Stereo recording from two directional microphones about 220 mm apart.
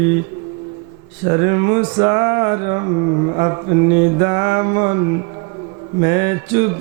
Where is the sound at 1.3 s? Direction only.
20° right (ahead or behind).